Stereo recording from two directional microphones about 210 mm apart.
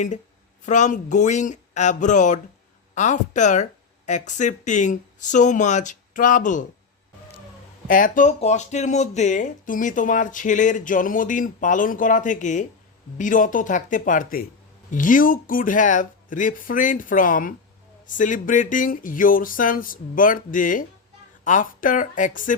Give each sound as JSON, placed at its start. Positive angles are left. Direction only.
{"t": 0.6, "sound": "speech", "side_deg": 35}
{"t": 7.9, "sound": "speech", "side_deg": 40}